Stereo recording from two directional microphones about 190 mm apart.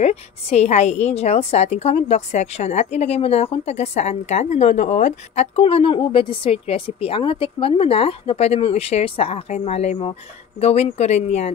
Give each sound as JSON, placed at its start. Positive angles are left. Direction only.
{"t": 0.0, "sound": "a woman's voice", "side_deg": 35}